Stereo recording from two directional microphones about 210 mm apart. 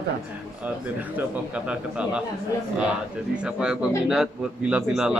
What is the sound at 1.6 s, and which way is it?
Speech, 5° right (ahead or behind).